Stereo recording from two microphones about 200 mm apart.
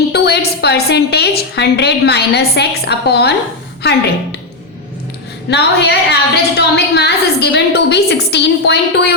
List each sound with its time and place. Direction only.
0.1 s a woman's voice: 55° left (ahead or behind)
5.5 s a woman's voice: 55° left (ahead or behind)